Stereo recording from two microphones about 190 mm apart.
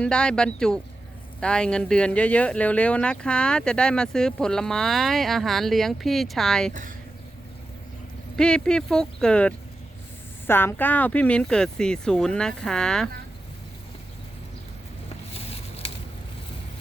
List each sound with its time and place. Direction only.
0.0 s speech: 5° left (ahead or behind)
8.4 s speech: 5° left (ahead or behind)
15.3 s a sound: 30° left (ahead or behind)